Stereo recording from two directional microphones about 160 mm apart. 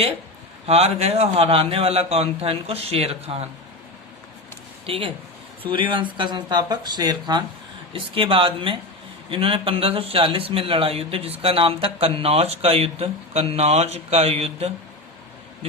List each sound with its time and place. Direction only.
0.7 s a man's voice: 40° right (ahead or behind)
4.9 s a man's voice: 35° right (ahead or behind)